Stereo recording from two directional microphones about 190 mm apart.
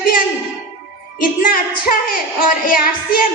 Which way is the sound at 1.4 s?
50° left (ahead or behind).